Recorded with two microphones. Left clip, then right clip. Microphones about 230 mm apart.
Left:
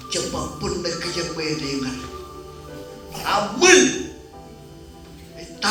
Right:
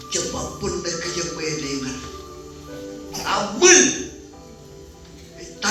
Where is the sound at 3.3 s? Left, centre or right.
Left.